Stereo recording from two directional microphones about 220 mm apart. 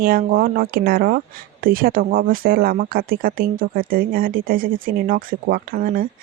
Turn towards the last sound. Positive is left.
turn(degrees=-45)  # may be behind; listen again after turning